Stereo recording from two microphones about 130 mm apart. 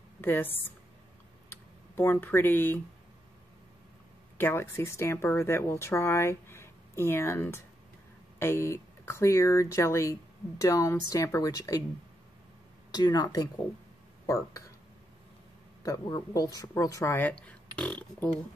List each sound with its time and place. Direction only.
0.2 s a woman's voice: 15° left (ahead or behind)
1.5 s speech: 15° left (ahead or behind)
4.4 s speech: 20° left (ahead or behind)
12.9 s speech: 30° left (ahead or behind)
15.8 s speech: 25° left (ahead or behind); by 18.3 s 10° left (ahead or behind)